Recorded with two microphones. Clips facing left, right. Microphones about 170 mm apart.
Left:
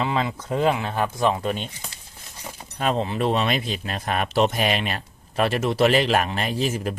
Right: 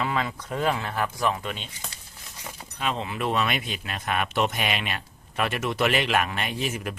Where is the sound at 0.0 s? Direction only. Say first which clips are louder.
Left 3 dB; 25° left (ahead or behind); by 1.7 s 40° left (ahead or behind).